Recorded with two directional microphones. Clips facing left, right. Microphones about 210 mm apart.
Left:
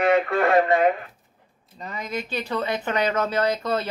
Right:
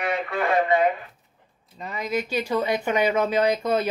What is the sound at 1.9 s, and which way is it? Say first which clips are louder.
Speech: right 4 dB; 10° right (ahead or behind).